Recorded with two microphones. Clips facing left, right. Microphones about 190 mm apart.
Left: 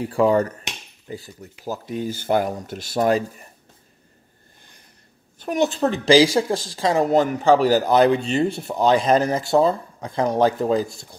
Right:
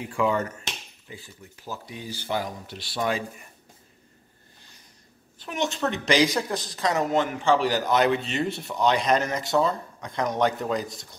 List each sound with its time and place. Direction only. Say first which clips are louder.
0.0 s speech: left 7 dB; 35° left (ahead or behind)
5.5 s speech: left 7 dB; 35° left (ahead or behind)